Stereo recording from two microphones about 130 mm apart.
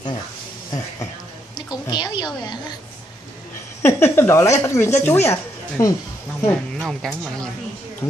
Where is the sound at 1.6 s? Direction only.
35° left (ahead or behind).